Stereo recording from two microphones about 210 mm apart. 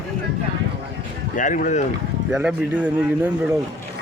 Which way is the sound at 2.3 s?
5° right (ahead or behind).